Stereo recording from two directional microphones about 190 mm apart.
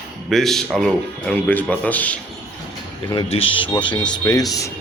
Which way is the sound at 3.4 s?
90° left.